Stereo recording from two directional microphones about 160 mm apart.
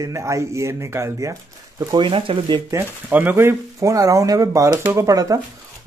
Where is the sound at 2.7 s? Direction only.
15° right (ahead or behind).